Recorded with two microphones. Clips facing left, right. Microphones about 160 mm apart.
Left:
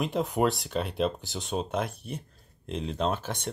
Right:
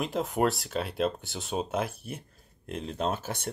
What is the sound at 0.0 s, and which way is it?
Speech, centre (ahead or behind).